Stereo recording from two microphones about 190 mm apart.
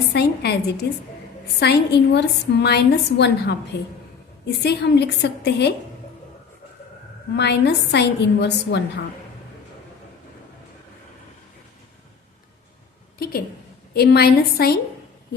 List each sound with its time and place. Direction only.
0.1 s a woman's voice: 60° left (ahead or behind)
7.3 s a woman's voice: 65° left (ahead or behind)
13.1 s a sound: 50° left (ahead or behind)
13.9 s a woman's voice: 55° left (ahead or behind)